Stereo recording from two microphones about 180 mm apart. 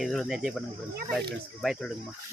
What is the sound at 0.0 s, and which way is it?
Speech, centre (ahead or behind).